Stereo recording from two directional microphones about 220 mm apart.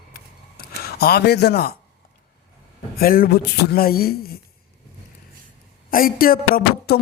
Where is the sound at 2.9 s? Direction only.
40° left (ahead or behind).